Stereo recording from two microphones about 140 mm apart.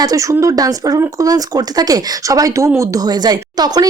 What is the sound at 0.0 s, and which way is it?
Speech, 25° right (ahead or behind).